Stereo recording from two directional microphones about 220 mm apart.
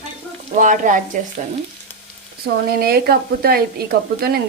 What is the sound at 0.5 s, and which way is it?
Speech, 35° right (ahead or behind).